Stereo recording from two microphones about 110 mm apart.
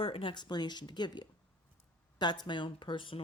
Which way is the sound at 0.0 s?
55° left (ahead or behind).